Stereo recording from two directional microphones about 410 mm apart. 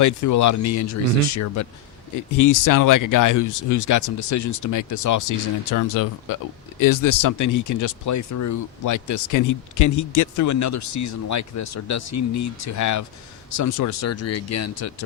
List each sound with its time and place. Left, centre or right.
0.0 s speech: left